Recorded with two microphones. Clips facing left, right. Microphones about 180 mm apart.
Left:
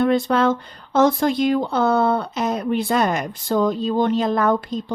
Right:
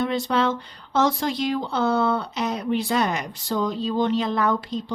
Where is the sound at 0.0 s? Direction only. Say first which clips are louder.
Left 5 dB; 55° left (ahead or behind).